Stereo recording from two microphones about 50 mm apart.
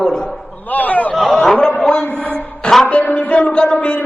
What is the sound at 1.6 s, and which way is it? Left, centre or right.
A man's voice, centre.